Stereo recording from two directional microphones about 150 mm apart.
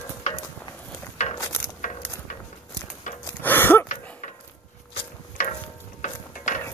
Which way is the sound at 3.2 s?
15° left (ahead or behind).